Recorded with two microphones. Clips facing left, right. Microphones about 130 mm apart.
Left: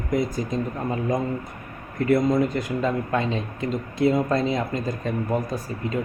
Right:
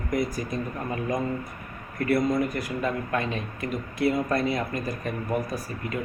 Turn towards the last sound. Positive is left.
turn(degrees=25)  # may be behind; listen again after turning